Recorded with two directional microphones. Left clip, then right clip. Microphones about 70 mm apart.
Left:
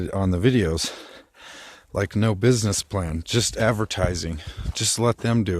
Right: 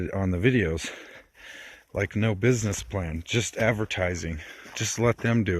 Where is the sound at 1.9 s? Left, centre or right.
Left.